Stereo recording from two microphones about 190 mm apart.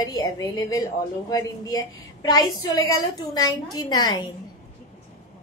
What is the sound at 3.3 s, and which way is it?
Speech, 20° left (ahead or behind).